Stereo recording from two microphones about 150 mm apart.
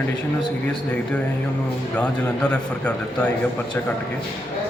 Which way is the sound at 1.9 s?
10° left (ahead or behind).